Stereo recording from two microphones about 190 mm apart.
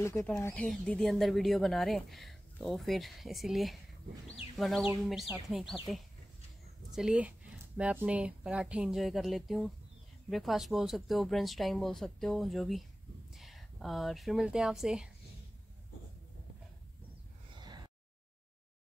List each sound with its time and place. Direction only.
0.0 s speech: 15° left (ahead or behind)
0.7 s speech: 5° left (ahead or behind)
6.9 s a woman's voice: 5° right (ahead or behind)
17.6 s a sound: 20° right (ahead or behind)